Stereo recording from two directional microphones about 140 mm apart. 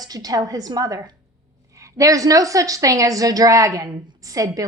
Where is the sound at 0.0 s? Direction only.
25° right (ahead or behind).